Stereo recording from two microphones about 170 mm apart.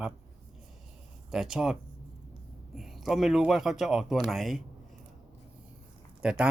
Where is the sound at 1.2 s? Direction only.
5° right (ahead or behind).